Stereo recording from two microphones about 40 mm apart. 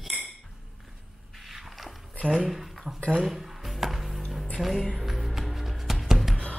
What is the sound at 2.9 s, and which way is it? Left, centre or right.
Speech, left.